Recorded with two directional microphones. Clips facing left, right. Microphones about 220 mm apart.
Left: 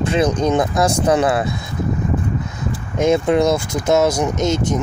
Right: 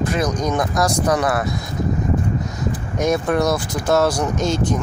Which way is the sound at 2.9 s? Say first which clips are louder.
Left 4 dB; 25° left (ahead or behind).